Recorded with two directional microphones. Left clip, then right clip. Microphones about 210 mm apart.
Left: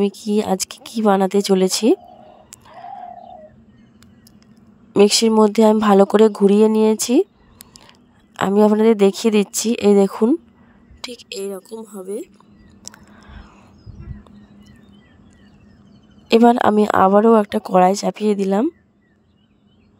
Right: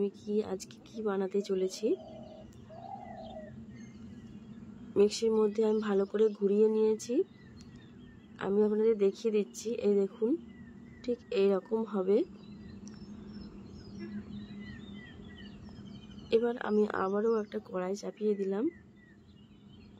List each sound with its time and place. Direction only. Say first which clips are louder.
0.0 s speech: left 13 dB; 55° left (ahead or behind)
4.9 s speech: left 14 dB; 55° left (ahead or behind)
8.4 s a woman's voice: left 14 dB; 55° left (ahead or behind)
11.3 s a woman's voice: right 1 dB; centre (ahead or behind)
12.9 s biting: left 13 dB; 55° left (ahead or behind)
16.3 s speech: left 17 dB; 55° left (ahead or behind)